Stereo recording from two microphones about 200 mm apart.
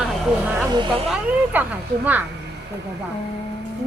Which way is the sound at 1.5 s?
10° right (ahead or behind).